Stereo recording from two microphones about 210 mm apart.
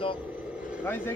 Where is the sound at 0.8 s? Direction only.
10° left (ahead or behind).